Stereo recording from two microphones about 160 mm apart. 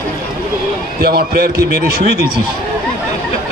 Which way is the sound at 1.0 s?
75° right (ahead or behind).